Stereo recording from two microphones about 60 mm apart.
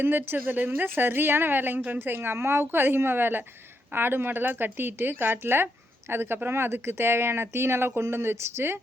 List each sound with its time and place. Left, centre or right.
0.0 s speech: right